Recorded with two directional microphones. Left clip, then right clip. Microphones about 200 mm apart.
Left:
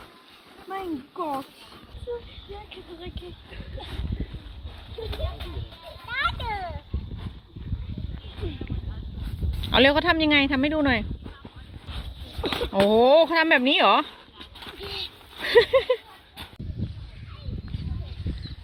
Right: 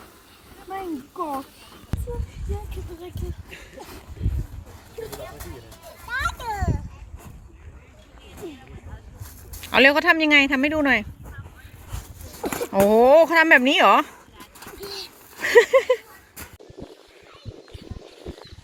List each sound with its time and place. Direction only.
0.7 s speech: 15° right (ahead or behind)
6.1 s children playing: centre (ahead or behind)
9.6 s speech: 10° left (ahead or behind)
12.4 s a sound: 20° right (ahead or behind)
12.9 s speech: 5° right (ahead or behind)
14.7 s a sound: 5° left (ahead or behind)